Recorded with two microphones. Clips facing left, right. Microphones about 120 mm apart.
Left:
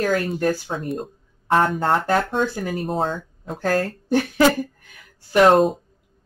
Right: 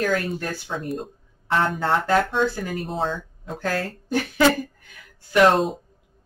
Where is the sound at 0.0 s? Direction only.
40° left (ahead or behind).